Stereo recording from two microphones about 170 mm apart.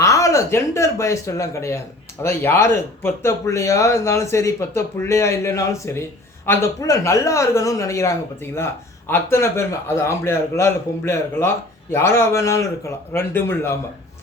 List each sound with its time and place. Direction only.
0.0 s speech: 20° left (ahead or behind)